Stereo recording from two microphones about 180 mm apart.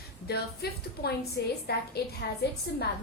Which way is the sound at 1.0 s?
60° left (ahead or behind).